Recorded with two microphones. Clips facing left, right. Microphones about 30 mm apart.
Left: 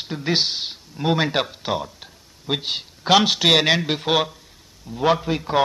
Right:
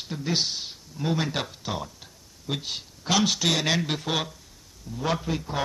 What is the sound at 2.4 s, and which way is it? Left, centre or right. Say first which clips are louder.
A man's voice: left 7 dB; left.